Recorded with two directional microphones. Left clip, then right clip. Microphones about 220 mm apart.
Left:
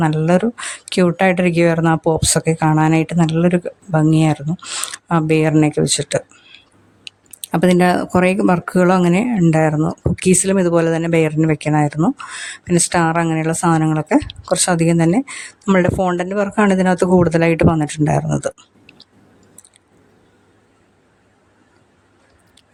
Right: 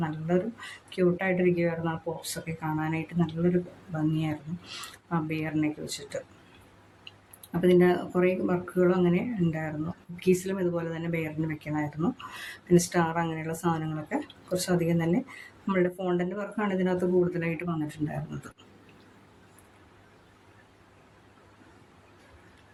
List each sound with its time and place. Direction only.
0.0 s speech: 45° left (ahead or behind)
7.1 s a sound: 40° left (ahead or behind)
7.6 s speech: 45° left (ahead or behind)